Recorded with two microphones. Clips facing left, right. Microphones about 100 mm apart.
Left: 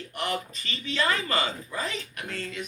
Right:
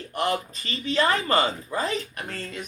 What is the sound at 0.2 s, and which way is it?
A woman's voice, 35° right (ahead or behind).